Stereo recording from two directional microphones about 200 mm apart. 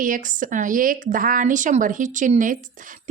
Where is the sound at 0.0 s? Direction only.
40° right (ahead or behind).